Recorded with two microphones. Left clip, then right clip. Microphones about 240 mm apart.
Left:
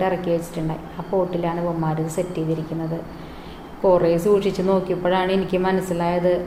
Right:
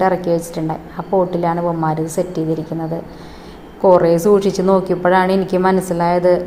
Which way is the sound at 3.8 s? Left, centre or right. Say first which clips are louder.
Right 6 dB; right.